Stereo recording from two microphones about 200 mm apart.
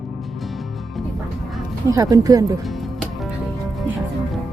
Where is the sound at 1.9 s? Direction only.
15° right (ahead or behind).